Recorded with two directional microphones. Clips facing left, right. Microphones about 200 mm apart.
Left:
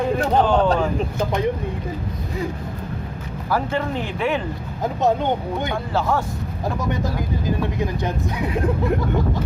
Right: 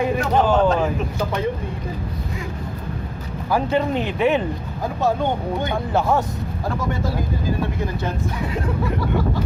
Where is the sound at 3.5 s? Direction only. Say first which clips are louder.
Right 3 dB; 20° right (ahead or behind).